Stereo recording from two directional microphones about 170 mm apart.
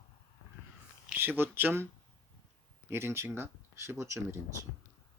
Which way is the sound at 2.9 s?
15° right (ahead or behind).